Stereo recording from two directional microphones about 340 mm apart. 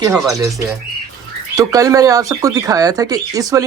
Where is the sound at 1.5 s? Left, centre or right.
Centre.